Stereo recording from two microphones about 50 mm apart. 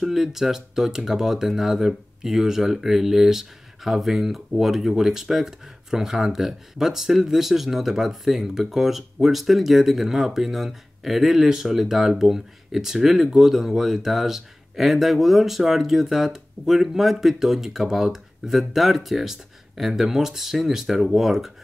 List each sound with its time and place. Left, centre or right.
0.0 s speech: centre